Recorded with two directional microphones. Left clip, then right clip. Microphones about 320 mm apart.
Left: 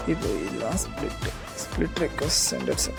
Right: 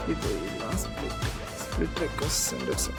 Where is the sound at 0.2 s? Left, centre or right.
Centre.